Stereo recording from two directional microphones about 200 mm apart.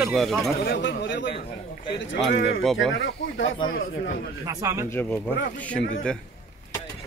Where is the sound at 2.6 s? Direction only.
Centre (ahead or behind).